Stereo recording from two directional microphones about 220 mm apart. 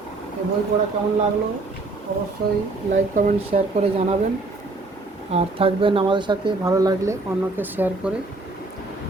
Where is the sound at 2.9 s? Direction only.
35° right (ahead or behind).